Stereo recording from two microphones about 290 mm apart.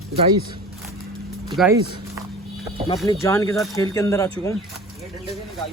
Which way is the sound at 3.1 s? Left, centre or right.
Centre.